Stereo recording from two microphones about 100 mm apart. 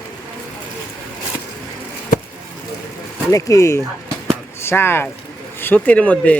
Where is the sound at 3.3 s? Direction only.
35° left (ahead or behind).